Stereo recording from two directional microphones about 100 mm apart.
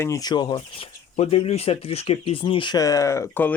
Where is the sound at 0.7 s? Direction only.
75° left (ahead or behind); by 2.8 s 55° left (ahead or behind).